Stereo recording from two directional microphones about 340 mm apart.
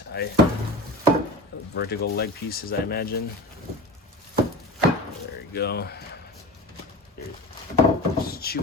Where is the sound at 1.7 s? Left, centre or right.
Left.